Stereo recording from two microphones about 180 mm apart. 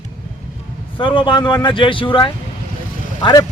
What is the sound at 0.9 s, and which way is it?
A man's voice, 25° left (ahead or behind).